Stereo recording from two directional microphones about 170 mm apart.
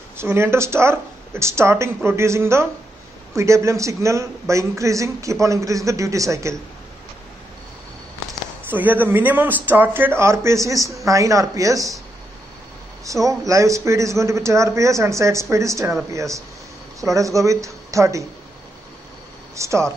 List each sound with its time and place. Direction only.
0.2 s speech: 15° right (ahead or behind)
8.6 s speech: 10° right (ahead or behind)
13.0 s speech: 20° right (ahead or behind)
19.5 s speech: 15° right (ahead or behind)